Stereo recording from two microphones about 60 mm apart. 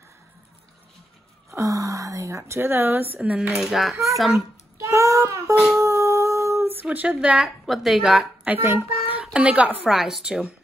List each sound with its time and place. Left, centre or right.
1.5 s speech: right
3.2 s a woman's voice: centre
4.8 s speech: right
5.8 s humming: right
6.7 s speech: right
7.2 s a woman's voice: centre
7.6 s a child's voice: centre
8.5 s a child's voice: right
9.2 s speech: centre
9.8 s a woman's voice: centre